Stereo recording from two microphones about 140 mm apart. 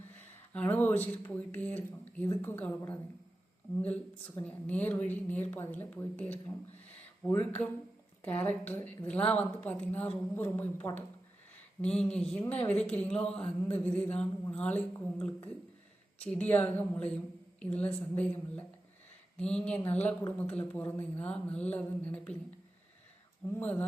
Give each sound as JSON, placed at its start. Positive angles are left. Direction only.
{"t": 0.2, "sound": "speech", "side_deg": 10}
{"t": 16.1, "sound": "speech", "side_deg": 10}
{"t": 23.5, "sound": "speech", "side_deg": 15}